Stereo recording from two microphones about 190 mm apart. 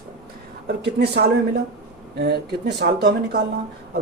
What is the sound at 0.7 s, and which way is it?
Speech, 60° right (ahead or behind).